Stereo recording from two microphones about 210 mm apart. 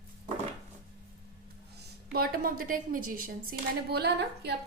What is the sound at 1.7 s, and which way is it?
A woman's voice, 45° right (ahead or behind).